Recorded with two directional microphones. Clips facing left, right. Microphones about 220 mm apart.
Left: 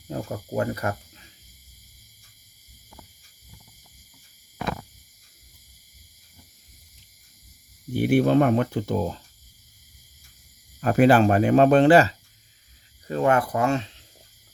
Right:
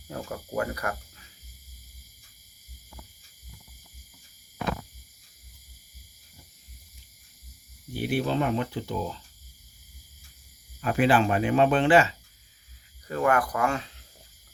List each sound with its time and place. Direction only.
0.1 s speech: 25° left (ahead or behind)
7.9 s speech: 50° left (ahead or behind)
10.8 s speech: 40° left (ahead or behind)
13.1 s speech: 25° left (ahead or behind)